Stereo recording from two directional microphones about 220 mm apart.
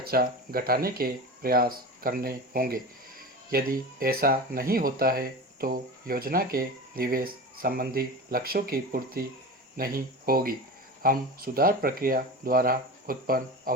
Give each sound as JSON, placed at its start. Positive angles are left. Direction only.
{"t": 0.0, "sound": "speech", "side_deg": -45}